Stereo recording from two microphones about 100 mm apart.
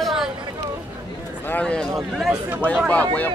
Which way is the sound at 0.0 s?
5° right (ahead or behind).